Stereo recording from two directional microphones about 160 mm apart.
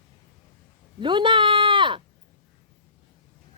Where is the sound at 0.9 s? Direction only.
30° right (ahead or behind).